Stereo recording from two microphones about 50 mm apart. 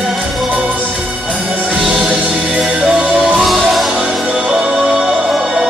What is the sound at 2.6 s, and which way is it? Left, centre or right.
Music, centre.